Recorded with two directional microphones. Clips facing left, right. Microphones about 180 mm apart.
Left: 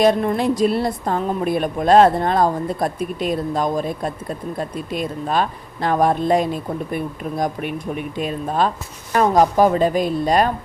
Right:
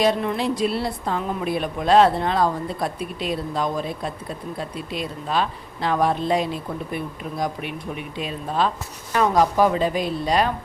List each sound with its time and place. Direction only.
0.0 s a woman's voice: 45° left (ahead or behind)